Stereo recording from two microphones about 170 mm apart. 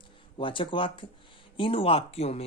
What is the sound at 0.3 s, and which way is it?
Speech, 30° left (ahead or behind).